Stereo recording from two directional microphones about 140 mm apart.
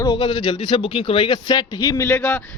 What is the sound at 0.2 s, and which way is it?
Speech, 35° left (ahead or behind).